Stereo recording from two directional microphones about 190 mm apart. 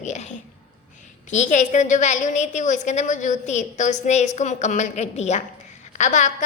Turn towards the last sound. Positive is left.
turn(degrees=40)  # may be behind; listen again after turning